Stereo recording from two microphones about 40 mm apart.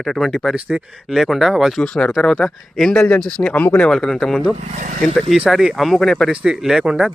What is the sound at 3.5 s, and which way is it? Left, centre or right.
Speech, left.